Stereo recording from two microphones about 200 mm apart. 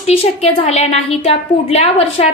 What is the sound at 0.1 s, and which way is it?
A woman's voice, 30° left (ahead or behind).